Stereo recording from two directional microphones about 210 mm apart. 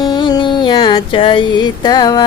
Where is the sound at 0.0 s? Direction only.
20° left (ahead or behind).